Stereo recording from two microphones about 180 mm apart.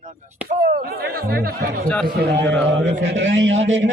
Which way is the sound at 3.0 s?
80° right.